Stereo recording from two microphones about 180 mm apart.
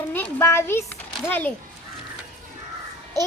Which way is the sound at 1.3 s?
10° left (ahead or behind).